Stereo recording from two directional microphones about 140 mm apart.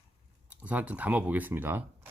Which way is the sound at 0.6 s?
10° right (ahead or behind).